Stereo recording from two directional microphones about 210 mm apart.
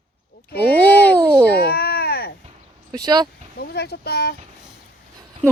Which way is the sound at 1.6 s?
50° left (ahead or behind).